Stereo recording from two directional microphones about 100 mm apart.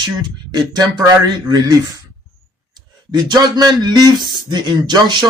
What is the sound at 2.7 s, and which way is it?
Speech, 45° right (ahead or behind).